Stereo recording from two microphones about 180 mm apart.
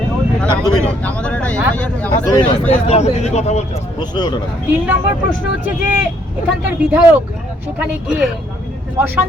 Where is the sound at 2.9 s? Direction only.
35° left (ahead or behind).